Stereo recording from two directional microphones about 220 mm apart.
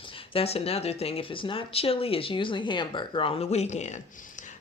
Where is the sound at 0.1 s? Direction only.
25° left (ahead or behind).